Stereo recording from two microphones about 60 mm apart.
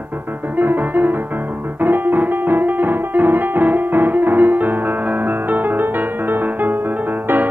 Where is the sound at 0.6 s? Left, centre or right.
Right.